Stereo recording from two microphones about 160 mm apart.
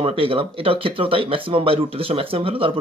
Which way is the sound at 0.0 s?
35° right (ahead or behind).